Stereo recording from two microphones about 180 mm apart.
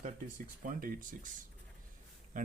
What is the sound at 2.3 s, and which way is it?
Speech, 50° right (ahead or behind).